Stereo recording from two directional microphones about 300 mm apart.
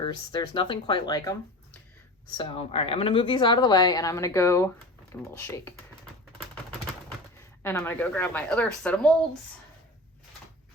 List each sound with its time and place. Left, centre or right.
0.0 s a woman's voice: centre
7.6 s speech: centre